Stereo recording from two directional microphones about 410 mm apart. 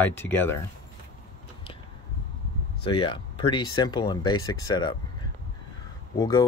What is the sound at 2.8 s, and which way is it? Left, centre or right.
Speech, centre.